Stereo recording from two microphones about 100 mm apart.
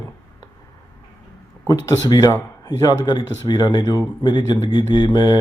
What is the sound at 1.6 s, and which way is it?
Speech, 35° left (ahead or behind).